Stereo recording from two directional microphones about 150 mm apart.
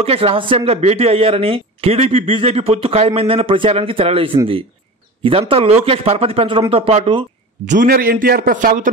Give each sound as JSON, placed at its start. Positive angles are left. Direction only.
{"t": 0.0, "sound": "speech", "side_deg": -40}
{"t": 7.6, "sound": "a man's voice", "side_deg": -60}